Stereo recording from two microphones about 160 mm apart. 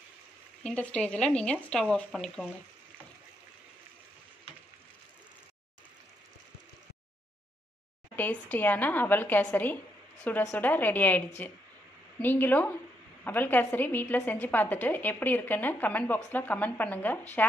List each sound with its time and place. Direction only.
0.7 s a woman's voice: 5° left (ahead or behind)
8.2 s a woman's voice: 10° left (ahead or behind)